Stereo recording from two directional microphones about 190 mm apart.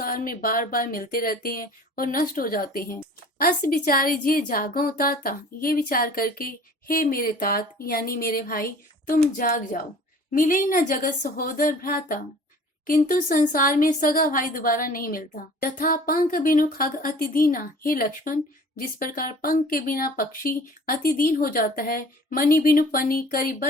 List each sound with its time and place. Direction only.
0.0 s a woman's voice: 50° left (ahead or behind)